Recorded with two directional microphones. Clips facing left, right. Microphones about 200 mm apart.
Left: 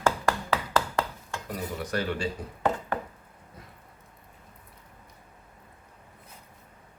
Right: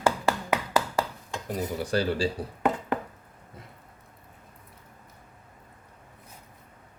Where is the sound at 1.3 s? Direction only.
25° right (ahead or behind).